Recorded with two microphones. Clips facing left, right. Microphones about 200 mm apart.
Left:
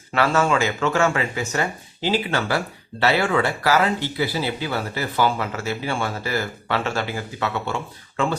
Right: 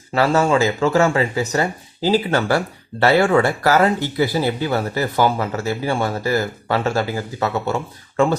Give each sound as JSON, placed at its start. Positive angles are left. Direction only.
{"t": 0.1, "sound": "speech", "side_deg": -35}